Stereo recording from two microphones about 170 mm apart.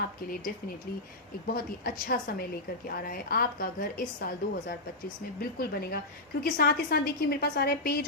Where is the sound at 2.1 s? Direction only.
60° left (ahead or behind).